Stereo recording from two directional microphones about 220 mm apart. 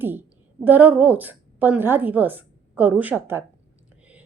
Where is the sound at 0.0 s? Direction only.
10° right (ahead or behind).